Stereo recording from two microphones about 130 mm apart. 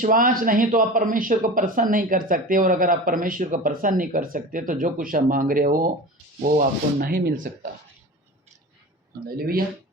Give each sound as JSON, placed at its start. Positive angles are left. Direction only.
{"t": 0.0, "sound": "speech", "side_deg": -90}